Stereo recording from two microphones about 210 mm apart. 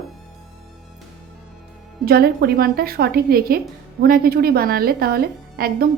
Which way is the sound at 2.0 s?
45° right (ahead or behind).